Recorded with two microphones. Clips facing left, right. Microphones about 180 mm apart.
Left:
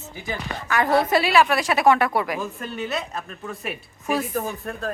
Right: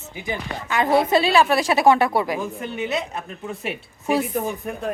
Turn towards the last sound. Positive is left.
turn(degrees=-15)  # may be behind; listen again after turning